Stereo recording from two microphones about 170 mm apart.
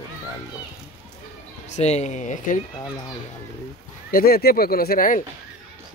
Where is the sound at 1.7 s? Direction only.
40° left (ahead or behind).